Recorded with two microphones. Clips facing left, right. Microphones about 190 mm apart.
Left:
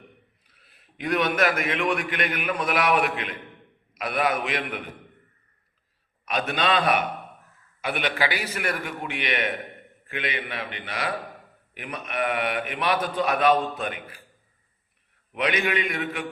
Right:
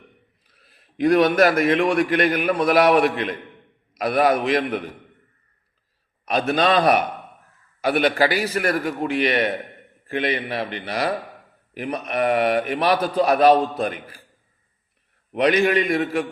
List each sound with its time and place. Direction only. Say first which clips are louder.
0.5 s a man's voice: right 13 dB; 40° right (ahead or behind)
6.2 s a man's voice: right 6 dB; 35° right (ahead or behind)
15.3 s a man's voice: right 8 dB; 35° right (ahead or behind)